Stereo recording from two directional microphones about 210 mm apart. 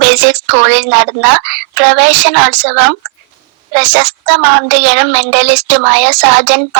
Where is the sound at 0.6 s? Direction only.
60° right (ahead or behind).